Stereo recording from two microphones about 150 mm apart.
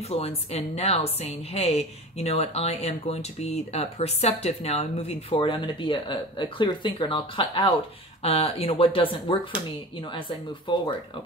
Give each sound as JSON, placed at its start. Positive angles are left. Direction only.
{"t": 0.1, "sound": "a woman's voice", "side_deg": 40}
{"t": 10.7, "sound": "speech", "side_deg": 30}